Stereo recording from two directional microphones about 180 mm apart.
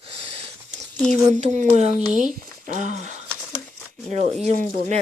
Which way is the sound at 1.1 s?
40° right (ahead or behind).